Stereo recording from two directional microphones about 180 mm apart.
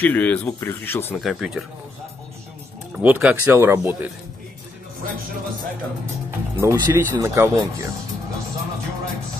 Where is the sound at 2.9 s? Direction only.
10° right (ahead or behind).